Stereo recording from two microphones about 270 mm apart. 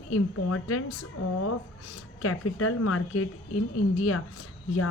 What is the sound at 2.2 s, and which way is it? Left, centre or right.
Speech, left.